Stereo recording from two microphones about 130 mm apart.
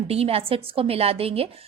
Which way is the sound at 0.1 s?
50° right (ahead or behind).